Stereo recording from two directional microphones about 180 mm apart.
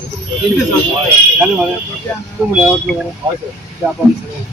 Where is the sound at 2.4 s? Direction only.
5° right (ahead or behind).